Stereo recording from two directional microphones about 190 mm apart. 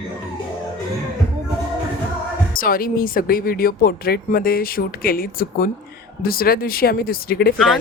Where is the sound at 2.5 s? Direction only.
50° left (ahead or behind).